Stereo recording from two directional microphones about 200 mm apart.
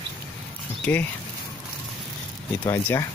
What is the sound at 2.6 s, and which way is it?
Speech, 15° left (ahead or behind).